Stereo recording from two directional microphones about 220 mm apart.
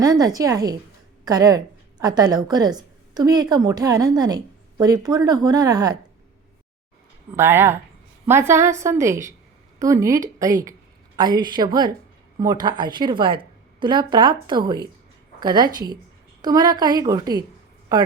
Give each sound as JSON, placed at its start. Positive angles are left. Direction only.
{"t": 0.0, "sound": "a woman's voice", "side_deg": -15}
{"t": 7.3, "sound": "a woman's voice", "side_deg": -10}